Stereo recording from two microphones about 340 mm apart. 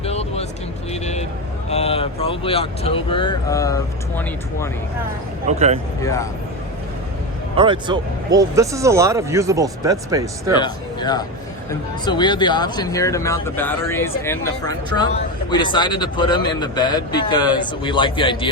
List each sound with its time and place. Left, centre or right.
0.0 s music: centre
0.9 s vehicle: centre
1.7 s speech: centre
5.5 s speech: centre
6.0 s speech: centre
7.5 s speech: centre
10.6 s speech: centre